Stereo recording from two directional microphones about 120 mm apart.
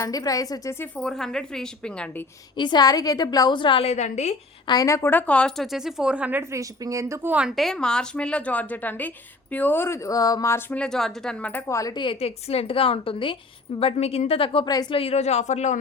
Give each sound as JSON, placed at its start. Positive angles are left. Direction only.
{"t": 0.0, "sound": "a woman's voice", "side_deg": 30}
{"t": 1.0, "sound": "a woman's voice", "side_deg": 5}
{"t": 2.6, "sound": "a woman's voice", "side_deg": 40}
{"t": 4.6, "sound": "a woman's voice", "side_deg": 35}
{"t": 5.7, "sound": "speech", "side_deg": -5}
{"t": 6.5, "sound": "a woman's voice", "side_deg": -25}
{"t": 7.3, "sound": "a woman's voice", "side_deg": -5}
{"t": 10.7, "sound": "a woman's voice", "side_deg": 5}
{"t": 11.7, "sound": "a woman's voice", "side_deg": 30}
{"t": 12.0, "sound": "a woman's voice", "side_deg": 55}
{"t": 14.7, "sound": "a woman's voice", "side_deg": 35}
{"t": 14.9, "sound": "speech", "side_deg": 60}